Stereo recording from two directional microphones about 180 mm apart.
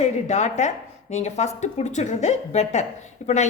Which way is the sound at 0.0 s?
40° left (ahead or behind).